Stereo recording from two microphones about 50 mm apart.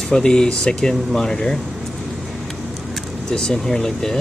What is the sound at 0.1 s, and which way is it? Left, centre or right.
Speech, centre.